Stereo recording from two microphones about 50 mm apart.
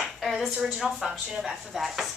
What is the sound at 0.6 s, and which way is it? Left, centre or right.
Speech, centre.